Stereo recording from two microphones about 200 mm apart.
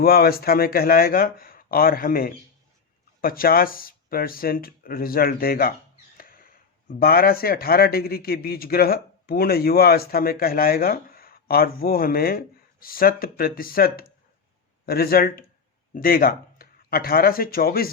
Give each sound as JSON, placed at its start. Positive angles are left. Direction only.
{"t": 0.0, "sound": "a man's voice", "side_deg": 50}
{"t": 6.1, "sound": "a sound", "side_deg": 45}
{"t": 7.0, "sound": "a man's voice", "side_deg": 50}